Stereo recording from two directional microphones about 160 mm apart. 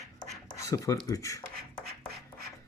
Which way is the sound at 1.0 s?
20° left (ahead or behind).